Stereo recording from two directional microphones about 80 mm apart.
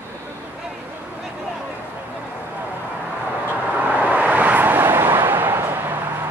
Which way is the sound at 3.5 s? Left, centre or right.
Centre.